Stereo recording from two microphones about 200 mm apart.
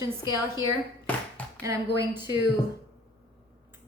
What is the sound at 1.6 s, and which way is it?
Speech, 15° right (ahead or behind).